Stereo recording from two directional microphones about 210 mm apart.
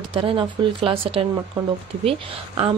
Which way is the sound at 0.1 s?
25° right (ahead or behind).